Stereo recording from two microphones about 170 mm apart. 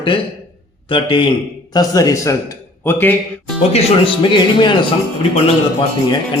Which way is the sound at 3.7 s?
30° left (ahead or behind).